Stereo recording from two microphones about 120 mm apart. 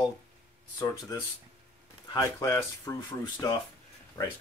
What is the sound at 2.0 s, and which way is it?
Speech, 30° left (ahead or behind).